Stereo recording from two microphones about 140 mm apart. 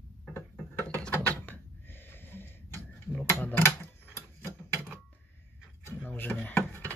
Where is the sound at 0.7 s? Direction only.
15° left (ahead or behind).